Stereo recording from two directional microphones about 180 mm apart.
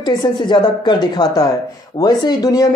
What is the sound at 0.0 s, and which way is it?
Speech, 20° left (ahead or behind).